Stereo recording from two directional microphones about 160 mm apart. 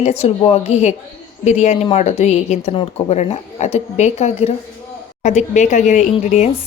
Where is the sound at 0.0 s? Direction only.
40° left (ahead or behind).